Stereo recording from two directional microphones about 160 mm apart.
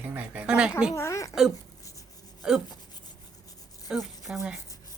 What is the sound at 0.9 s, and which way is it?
Speech, 20° left (ahead or behind).